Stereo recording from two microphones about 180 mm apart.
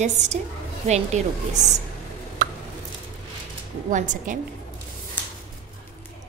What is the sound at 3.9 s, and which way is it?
Speech, 45° right (ahead or behind).